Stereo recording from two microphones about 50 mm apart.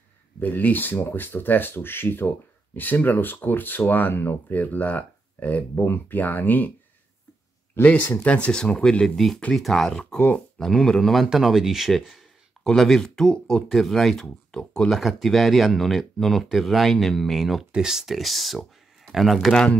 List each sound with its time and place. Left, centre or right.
0.4 s speech: left
4.1 s speech: left
7.8 s speech: left
9.0 s speech: centre
10.1 s speech: left
10.6 s speech: centre
11.3 s speech: centre
13.7 s speech: centre
14.1 s speech: centre
15.0 s speech: centre